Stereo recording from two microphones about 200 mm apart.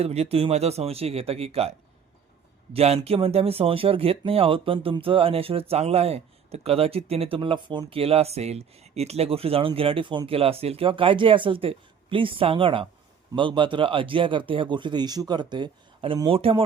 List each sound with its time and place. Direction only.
0.0 s speech: 30° right (ahead or behind)
2.7 s speech: 30° right (ahead or behind)